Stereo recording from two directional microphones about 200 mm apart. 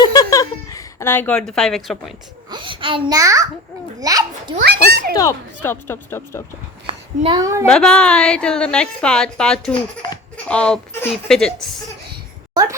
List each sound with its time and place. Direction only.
0.0 s a sound: 20° left (ahead or behind); by 2.1 s centre (ahead or behind)
2.5 s a child's voice: 25° right (ahead or behind)
4.5 s a child's voice: 50° right (ahead or behind)
5.1 s speech: 15° left (ahead or behind)
6.8 s a sound: 25° right (ahead or behind)
7.7 s a woman's voice: 5° left (ahead or behind)